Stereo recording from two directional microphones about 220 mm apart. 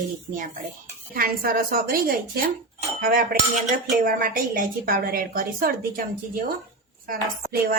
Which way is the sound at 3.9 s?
40° right (ahead or behind).